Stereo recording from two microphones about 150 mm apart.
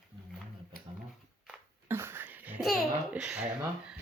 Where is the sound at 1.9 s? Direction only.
15° right (ahead or behind).